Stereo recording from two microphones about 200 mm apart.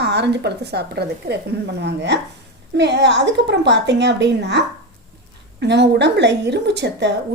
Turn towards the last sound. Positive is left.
turn(degrees=-60)  # may be behind; listen again after turning